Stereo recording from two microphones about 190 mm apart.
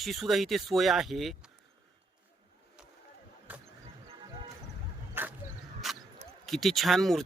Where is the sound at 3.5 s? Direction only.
10° right (ahead or behind).